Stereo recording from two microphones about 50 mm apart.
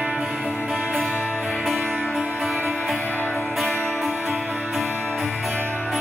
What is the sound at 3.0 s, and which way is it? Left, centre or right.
Music, left.